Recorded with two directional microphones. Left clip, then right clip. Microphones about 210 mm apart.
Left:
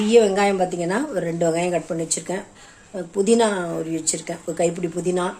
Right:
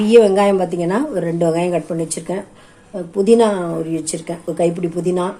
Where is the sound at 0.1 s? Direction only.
5° right (ahead or behind).